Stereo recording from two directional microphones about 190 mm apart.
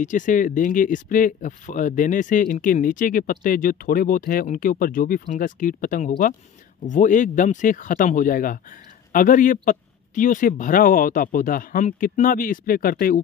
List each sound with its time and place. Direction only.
0.0 s speech: 40° left (ahead or behind)